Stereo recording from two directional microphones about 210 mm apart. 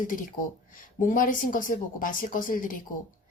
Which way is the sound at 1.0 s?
40° left (ahead or behind).